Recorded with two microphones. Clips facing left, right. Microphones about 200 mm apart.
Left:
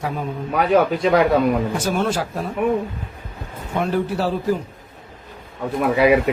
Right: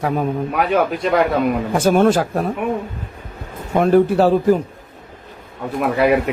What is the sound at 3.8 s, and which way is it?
Speech, 55° right (ahead or behind).